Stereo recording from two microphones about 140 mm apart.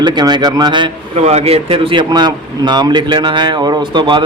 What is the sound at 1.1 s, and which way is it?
Speech, 50° right (ahead or behind).